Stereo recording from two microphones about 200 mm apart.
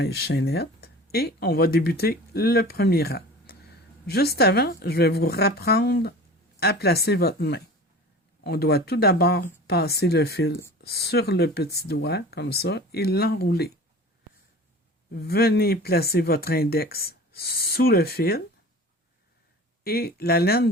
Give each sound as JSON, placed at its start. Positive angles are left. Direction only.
{"t": 0.0, "sound": "speech", "side_deg": 55}
{"t": 15.1, "sound": "speech", "side_deg": 50}
{"t": 19.8, "sound": "speech", "side_deg": 50}